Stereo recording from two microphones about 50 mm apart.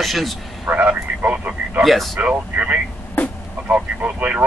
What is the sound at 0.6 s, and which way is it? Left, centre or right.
Speech, right.